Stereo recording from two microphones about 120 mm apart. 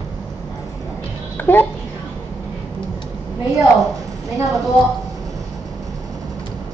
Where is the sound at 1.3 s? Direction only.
15° left (ahead or behind).